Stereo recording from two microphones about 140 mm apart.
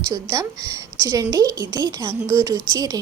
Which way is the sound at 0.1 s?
20° right (ahead or behind).